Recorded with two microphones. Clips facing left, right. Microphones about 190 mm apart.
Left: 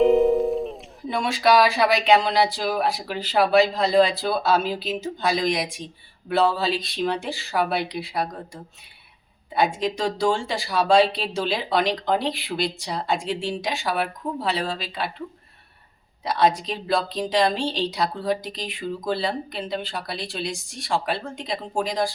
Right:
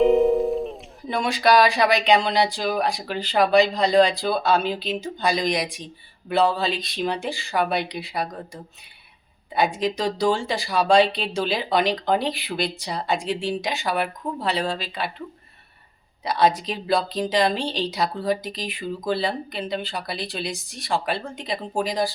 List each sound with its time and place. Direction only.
0.0 s speech: centre (ahead or behind)
9.5 s speech: centre (ahead or behind)
16.2 s speech: centre (ahead or behind)